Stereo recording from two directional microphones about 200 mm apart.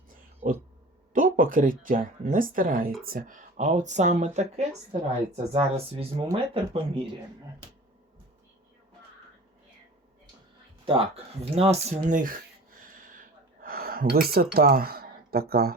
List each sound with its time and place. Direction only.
0.4 s speech: 45° right (ahead or behind); by 7.0 s 25° right (ahead or behind)
10.8 s speech: 30° right (ahead or behind)
13.1 s a sound: 45° right (ahead or behind)